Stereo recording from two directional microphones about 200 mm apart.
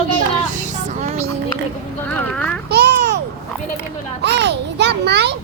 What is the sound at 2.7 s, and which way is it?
Babbling, 55° right (ahead or behind).